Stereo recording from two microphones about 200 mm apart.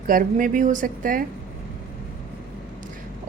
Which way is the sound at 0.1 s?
40° right (ahead or behind).